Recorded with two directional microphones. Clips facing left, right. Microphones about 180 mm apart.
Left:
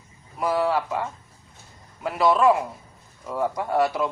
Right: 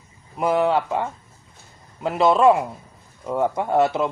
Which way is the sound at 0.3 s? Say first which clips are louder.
Right 3 dB; 25° right (ahead or behind).